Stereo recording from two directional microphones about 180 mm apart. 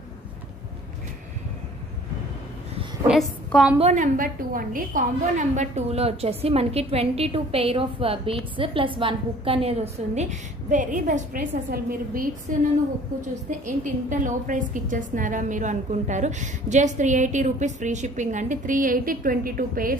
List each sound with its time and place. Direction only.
3.1 s a woman's voice: centre (ahead or behind)
3.7 s a woman's voice: 40° right (ahead or behind)